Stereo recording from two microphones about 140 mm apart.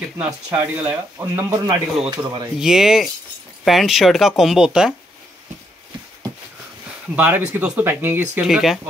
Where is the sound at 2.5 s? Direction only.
5° right (ahead or behind).